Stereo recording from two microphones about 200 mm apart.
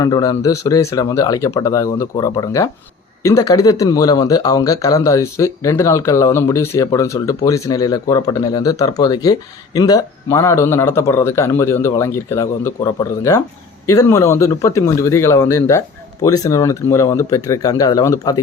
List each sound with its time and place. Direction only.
0.0 s speech: 20° left (ahead or behind)